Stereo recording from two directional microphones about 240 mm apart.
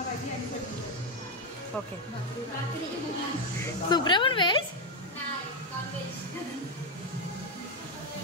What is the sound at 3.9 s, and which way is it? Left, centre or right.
Speech, centre.